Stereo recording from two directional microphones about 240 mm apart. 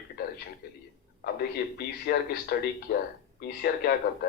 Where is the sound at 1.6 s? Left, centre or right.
Left.